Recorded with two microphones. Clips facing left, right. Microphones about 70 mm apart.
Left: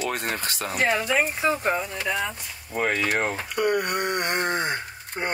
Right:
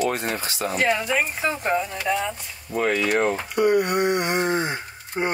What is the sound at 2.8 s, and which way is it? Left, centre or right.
Speech, left.